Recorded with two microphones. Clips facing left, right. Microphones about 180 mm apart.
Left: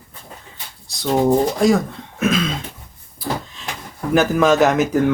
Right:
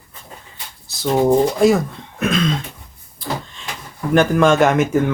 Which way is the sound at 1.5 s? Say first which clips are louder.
Right 2 dB; centre (ahead or behind).